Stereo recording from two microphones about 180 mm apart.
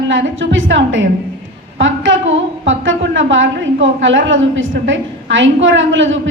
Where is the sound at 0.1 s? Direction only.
90° right.